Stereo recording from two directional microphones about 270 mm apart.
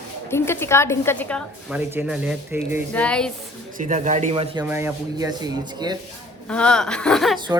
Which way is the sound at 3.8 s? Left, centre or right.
Right.